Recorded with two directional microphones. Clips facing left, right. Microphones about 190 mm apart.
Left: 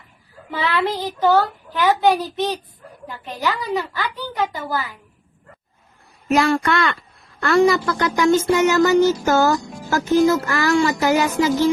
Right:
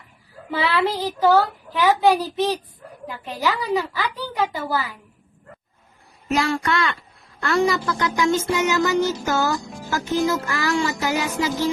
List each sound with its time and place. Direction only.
0.5 s a child's voice: 10° right (ahead or behind)
6.3 s a child's voice: 60° left (ahead or behind)